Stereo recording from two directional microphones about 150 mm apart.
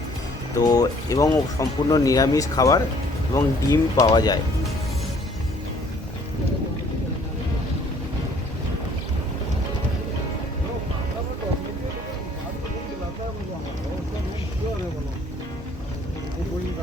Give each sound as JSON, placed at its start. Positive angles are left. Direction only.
{"t": 0.5, "sound": "speech", "side_deg": 25}